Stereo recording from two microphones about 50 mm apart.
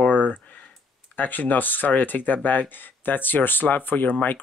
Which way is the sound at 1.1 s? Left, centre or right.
Left.